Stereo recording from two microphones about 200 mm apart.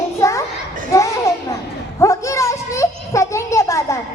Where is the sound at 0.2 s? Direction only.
15° left (ahead or behind).